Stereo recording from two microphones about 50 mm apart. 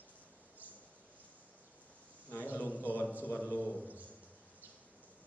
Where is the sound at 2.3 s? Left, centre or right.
Left.